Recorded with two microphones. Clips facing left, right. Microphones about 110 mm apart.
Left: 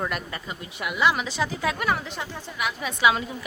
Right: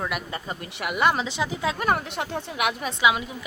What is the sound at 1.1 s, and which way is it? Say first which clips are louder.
Speech: even; 20° right (ahead or behind).